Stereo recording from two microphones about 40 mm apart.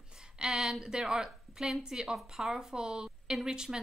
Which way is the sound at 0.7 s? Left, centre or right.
Centre.